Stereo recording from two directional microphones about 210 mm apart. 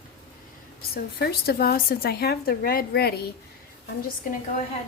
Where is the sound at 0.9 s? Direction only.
50° left (ahead or behind).